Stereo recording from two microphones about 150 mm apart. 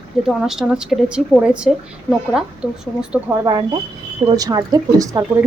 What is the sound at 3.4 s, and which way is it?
Speech, 25° right (ahead or behind).